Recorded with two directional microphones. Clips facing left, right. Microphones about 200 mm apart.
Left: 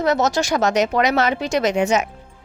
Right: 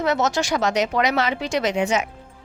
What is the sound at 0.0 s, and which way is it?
Speech, 40° left (ahead or behind).